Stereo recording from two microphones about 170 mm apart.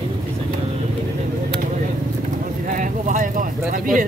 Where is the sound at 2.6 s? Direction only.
50° right (ahead or behind).